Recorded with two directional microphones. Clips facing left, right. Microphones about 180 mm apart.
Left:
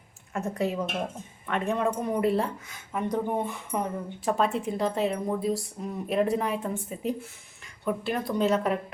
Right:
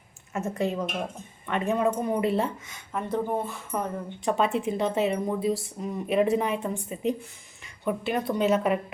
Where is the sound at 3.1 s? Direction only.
15° left (ahead or behind).